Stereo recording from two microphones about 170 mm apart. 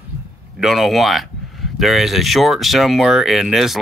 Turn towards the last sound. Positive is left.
turn(degrees=0)  # may be behind; listen again after turning